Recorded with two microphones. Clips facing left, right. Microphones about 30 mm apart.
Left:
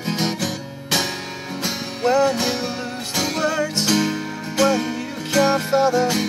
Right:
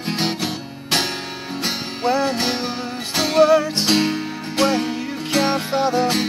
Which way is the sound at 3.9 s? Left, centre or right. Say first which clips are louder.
Right 2 dB; right.